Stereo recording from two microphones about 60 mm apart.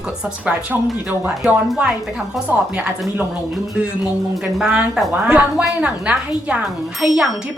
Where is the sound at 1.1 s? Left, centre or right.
Centre.